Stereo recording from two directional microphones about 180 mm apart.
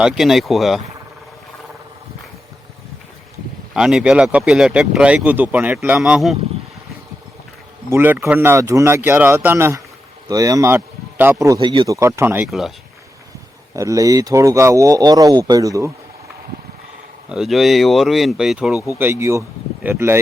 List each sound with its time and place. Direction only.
0.0 s speech: centre (ahead or behind)
3.8 s speech: 5° right (ahead or behind)
7.9 s speech: 10° right (ahead or behind); by 11.9 s 25° right (ahead or behind)
11.9 s speech: 15° right (ahead or behind)
12.5 s speech: centre (ahead or behind)
13.7 s speech: 20° right (ahead or behind)
17.2 s speech: 5° right (ahead or behind)
18.9 s speech: 15° right (ahead or behind)